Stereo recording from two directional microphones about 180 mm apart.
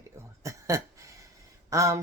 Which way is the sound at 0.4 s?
15° right (ahead or behind).